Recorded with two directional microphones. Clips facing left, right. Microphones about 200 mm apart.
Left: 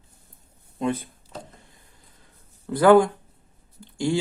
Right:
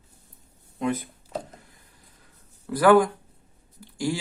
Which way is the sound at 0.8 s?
30° left (ahead or behind).